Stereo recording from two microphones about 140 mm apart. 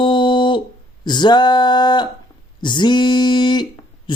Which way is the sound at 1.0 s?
30° left (ahead or behind).